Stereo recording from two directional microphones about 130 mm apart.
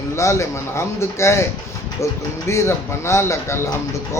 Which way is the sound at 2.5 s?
20° left (ahead or behind).